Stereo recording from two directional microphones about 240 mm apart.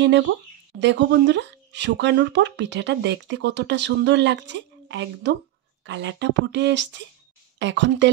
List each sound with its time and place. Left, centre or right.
0.7 s speech: right